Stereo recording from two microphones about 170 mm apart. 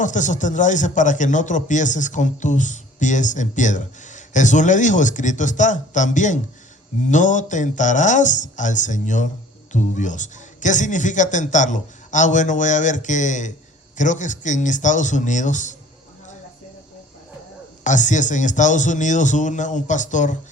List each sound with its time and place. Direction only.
0.0 s speech: 45° left (ahead or behind)
17.8 s speech: 45° left (ahead or behind)